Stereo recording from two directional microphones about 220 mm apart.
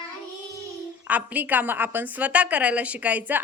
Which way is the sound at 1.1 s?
5° right (ahead or behind).